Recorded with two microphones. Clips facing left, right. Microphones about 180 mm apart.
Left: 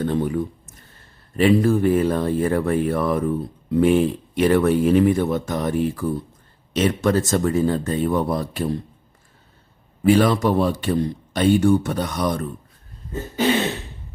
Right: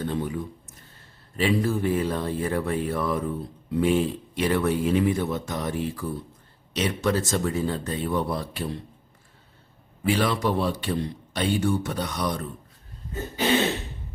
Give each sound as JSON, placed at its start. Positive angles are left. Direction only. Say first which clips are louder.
{"t": 0.1, "sound": "a sound", "louder": "left 7 dB", "side_deg": 50}
{"t": 1.4, "sound": "speech", "louder": "left 7 dB", "side_deg": 55}
{"t": 10.0, "sound": "speech", "louder": "left 7 dB", "side_deg": 45}